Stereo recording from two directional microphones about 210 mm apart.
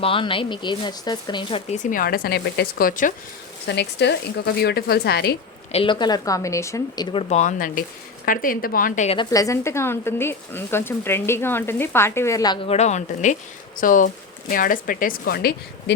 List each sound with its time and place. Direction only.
0.0 s speech: 25° left (ahead or behind)
1.8 s speech: 40° left (ahead or behind)
3.7 s speech: 55° left (ahead or behind)
5.7 s speech: 25° left (ahead or behind); by 9.0 s 40° left (ahead or behind)
9.0 s a woman's voice: 20° left (ahead or behind); by 15.5 s 45° left (ahead or behind)